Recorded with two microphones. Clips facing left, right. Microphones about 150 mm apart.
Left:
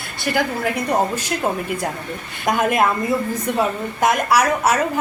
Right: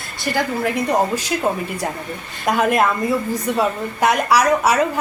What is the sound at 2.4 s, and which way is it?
A woman's voice, centre (ahead or behind).